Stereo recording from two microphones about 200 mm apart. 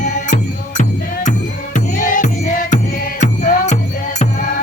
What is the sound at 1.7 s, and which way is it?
Music, 40° left (ahead or behind).